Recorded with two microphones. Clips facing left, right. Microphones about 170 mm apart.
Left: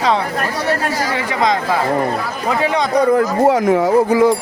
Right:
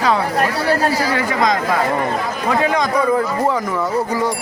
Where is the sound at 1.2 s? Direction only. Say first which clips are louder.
Even; 25° left (ahead or behind).